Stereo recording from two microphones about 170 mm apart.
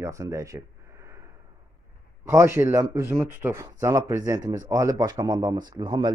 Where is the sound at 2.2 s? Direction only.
15° right (ahead or behind).